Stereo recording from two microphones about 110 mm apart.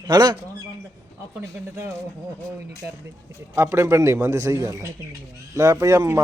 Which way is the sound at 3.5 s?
25° right (ahead or behind).